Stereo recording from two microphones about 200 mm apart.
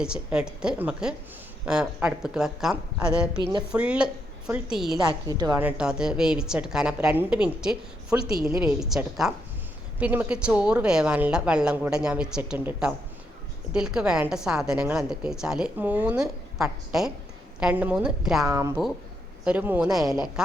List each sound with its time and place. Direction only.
0.0 s speech: 5° right (ahead or behind)
5.3 s a woman's voice: 20° right (ahead or behind)
5.6 s speech: 5° right (ahead or behind)
8.4 s speech: 15° right (ahead or behind)
8.6 s speech: 5° right (ahead or behind)
18.4 s speech: 15° right (ahead or behind)